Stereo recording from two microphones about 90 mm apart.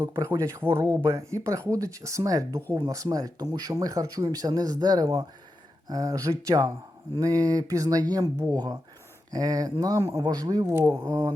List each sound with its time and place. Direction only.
0.0 s speech: 30° right (ahead or behind)
6.5 s speech: 50° right (ahead or behind)
7.2 s speech: 40° right (ahead or behind)
10.2 s speech: 45° right (ahead or behind)
10.7 s speech: 30° right (ahead or behind)